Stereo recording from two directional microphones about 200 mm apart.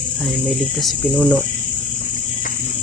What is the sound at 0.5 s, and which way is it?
Speech, centre (ahead or behind).